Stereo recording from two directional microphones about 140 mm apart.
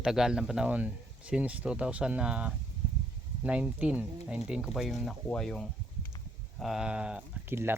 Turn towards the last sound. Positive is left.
turn(degrees=-15)  # may be behind; listen again after turning